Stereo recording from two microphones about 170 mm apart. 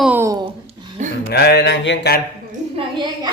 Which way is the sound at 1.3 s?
70° left (ahead or behind).